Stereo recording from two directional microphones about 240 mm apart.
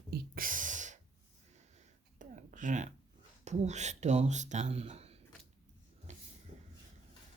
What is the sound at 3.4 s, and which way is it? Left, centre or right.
Speech, right.